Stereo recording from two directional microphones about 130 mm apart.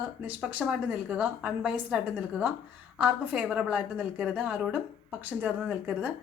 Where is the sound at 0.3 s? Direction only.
10° right (ahead or behind).